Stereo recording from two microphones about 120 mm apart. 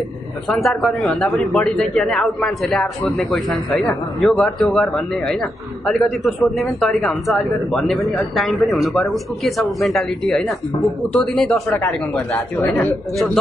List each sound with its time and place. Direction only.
0.5 s a man's voice: 5° left (ahead or behind)
11.7 s speech: 20° left (ahead or behind)